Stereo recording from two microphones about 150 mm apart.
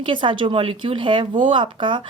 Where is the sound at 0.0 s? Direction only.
35° right (ahead or behind).